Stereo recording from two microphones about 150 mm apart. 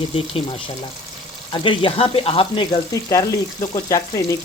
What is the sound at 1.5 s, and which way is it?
Speech, 35° left (ahead or behind).